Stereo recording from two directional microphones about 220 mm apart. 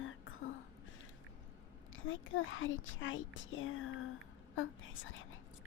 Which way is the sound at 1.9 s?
60° left (ahead or behind).